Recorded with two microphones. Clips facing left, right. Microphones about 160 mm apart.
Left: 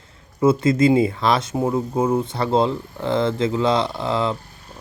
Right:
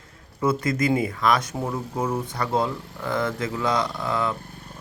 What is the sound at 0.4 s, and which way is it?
Speech, 25° left (ahead or behind).